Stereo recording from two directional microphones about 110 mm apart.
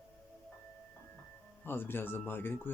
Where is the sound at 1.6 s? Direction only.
20° left (ahead or behind).